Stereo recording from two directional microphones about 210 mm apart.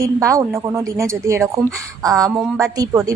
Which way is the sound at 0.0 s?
15° right (ahead or behind).